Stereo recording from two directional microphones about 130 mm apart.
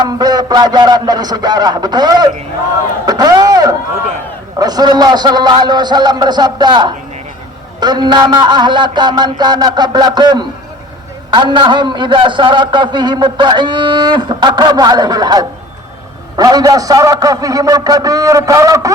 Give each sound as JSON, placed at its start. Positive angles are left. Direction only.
{"t": 0.0, "sound": "a man's voice", "side_deg": -30}